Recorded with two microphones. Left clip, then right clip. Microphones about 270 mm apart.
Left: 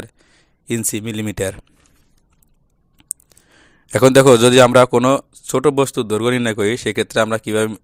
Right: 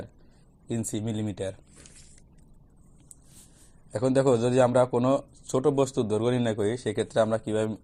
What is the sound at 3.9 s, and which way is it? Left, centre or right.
A man's voice, left.